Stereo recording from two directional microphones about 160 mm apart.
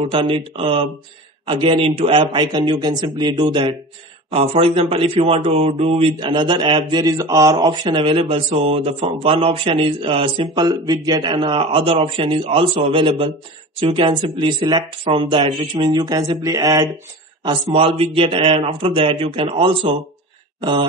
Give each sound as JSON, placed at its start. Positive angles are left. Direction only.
{"t": 0.1, "sound": "speech", "side_deg": -35}